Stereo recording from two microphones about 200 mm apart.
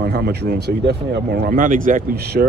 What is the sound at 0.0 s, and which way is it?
Speech, 50° right (ahead or behind).